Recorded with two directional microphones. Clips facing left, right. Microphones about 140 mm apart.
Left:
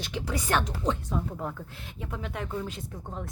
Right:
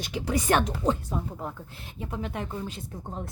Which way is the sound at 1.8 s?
35° right (ahead or behind).